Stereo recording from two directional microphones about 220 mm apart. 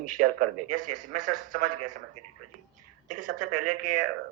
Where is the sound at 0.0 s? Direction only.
40° right (ahead or behind).